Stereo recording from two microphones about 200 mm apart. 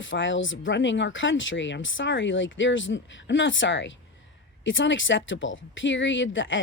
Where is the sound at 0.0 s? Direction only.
70° left (ahead or behind).